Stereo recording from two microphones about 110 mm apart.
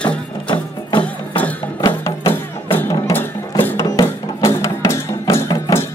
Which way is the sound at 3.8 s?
30° left (ahead or behind).